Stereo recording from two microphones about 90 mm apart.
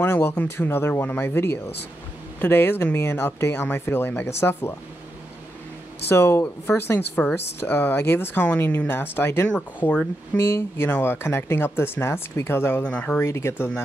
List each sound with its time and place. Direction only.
0.0 s speech: 25° left (ahead or behind)
6.0 s speech: 25° left (ahead or behind)
12.9 s speech: 15° left (ahead or behind)
13.2 s speech: 30° left (ahead or behind)